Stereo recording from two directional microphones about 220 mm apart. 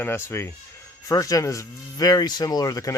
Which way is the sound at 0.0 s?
10° left (ahead or behind).